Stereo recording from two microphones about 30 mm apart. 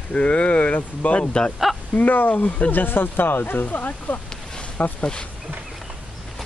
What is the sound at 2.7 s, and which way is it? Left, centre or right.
Speech, left.